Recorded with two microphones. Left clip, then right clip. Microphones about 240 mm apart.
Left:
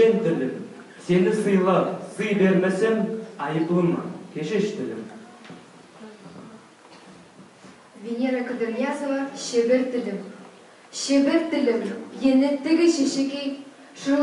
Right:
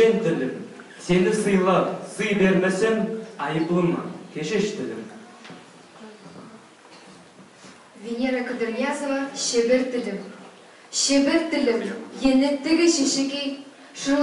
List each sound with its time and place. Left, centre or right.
0.0 s a sound: centre
1.1 s a woman's voice: centre
8.1 s a woman's voice: centre